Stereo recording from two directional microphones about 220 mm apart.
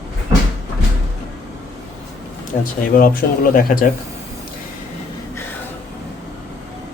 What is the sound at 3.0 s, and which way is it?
Speech, 40° left (ahead or behind).